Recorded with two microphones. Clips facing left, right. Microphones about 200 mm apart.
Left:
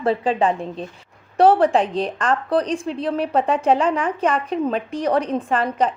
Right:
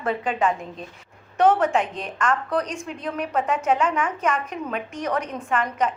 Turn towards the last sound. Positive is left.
turn(degrees=35)  # may be behind; listen again after turning